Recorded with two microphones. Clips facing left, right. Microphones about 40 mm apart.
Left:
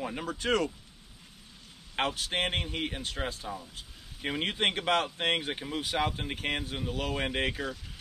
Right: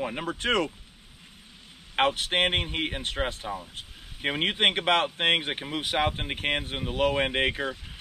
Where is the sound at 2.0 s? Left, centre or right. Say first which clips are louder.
Right 6 dB; right.